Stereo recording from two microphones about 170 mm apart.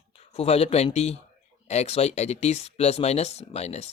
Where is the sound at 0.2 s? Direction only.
35° left (ahead or behind).